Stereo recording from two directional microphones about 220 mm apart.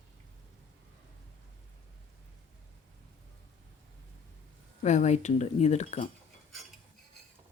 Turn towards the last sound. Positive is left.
turn(degrees=30)  # may be behind; listen again after turning